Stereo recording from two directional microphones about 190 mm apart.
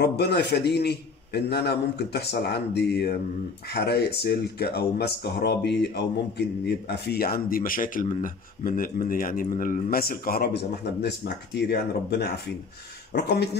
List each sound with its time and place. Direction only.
0.0 s speech: 60° left (ahead or behind)